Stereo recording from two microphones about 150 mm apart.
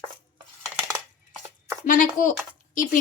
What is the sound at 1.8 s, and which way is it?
Speech, 60° left (ahead or behind).